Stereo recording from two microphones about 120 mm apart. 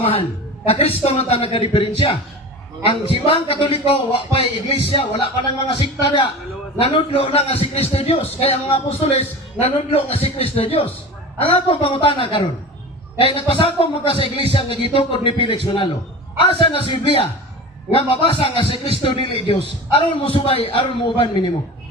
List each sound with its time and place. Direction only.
0.0 s a woman's voice: 50° left (ahead or behind)